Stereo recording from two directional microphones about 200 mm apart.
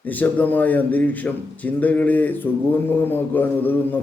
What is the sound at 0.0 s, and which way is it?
A man's voice, 10° left (ahead or behind).